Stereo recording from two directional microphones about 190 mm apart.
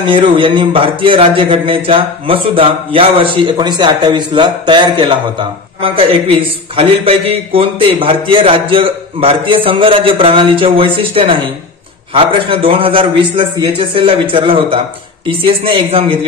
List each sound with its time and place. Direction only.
0.0 s a man's voice: 25° right (ahead or behind)